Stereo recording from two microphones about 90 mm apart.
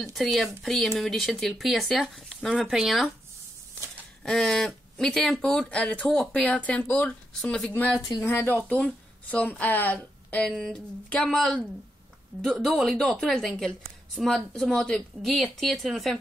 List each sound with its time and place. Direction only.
0.0 s speech: centre (ahead or behind)
4.2 s speech: 5° left (ahead or behind)
8.2 s speech: 25° left (ahead or behind)
10.6 s speech: 5° left (ahead or behind)